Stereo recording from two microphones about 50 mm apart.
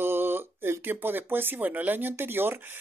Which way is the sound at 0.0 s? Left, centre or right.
Right.